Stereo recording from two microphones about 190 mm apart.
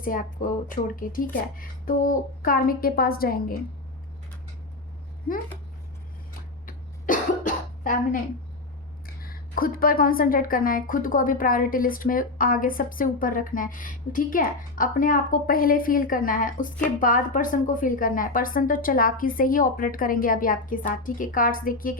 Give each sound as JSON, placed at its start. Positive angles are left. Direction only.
{"t": 0.0, "sound": "a woman's voice", "side_deg": 45}
{"t": 6.7, "sound": "cough", "side_deg": 45}
{"t": 9.0, "sound": "a woman's voice", "side_deg": 50}